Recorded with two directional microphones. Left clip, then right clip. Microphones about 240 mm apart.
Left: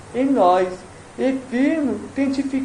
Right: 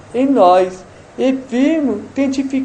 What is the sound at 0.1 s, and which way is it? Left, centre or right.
Speech, right.